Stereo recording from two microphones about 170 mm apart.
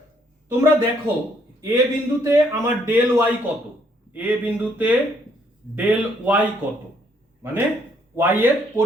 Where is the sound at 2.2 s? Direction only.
15° right (ahead or behind).